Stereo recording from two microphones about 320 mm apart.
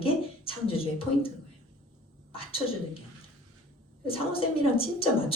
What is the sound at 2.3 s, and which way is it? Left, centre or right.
Speech, centre.